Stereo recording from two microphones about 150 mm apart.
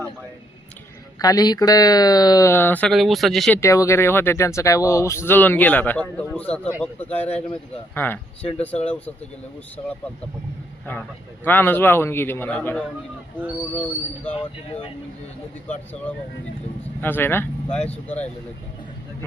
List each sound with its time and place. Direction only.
1.2 s speech: 25° left (ahead or behind)
2.9 s speech: centre (ahead or behind)
3.5 s speech: 20° left (ahead or behind)
11.4 s speech: 15° left (ahead or behind)
15.6 s speech: 10° left (ahead or behind)